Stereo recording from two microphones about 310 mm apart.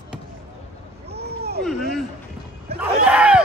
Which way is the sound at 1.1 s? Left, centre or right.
Right.